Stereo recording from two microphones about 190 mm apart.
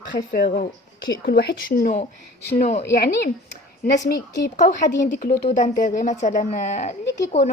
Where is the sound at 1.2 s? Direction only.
60° left (ahead or behind).